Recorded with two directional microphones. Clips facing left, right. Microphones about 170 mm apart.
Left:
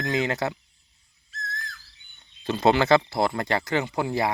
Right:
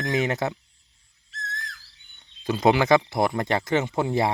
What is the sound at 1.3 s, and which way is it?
Whistle, 75° right (ahead or behind).